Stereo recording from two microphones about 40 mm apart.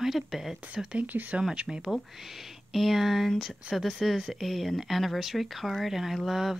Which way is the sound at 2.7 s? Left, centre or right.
Centre.